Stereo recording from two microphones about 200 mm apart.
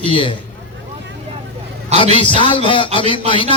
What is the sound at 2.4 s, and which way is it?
Speech, 25° left (ahead or behind).